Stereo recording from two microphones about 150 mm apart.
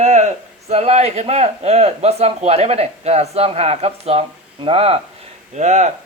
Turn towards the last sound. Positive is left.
turn(degrees=-50)  # may be behind; listen again after turning